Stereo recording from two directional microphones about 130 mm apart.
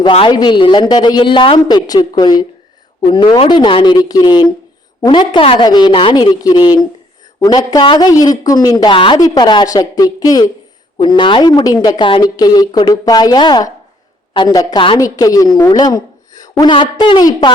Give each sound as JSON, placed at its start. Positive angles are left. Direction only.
{"t": 0.0, "sound": "a woman's voice", "side_deg": 40}
{"t": 9.1, "sound": "a woman's voice", "side_deg": 30}